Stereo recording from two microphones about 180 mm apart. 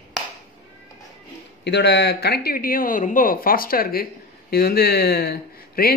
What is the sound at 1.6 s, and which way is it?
Speech, 75° left (ahead or behind).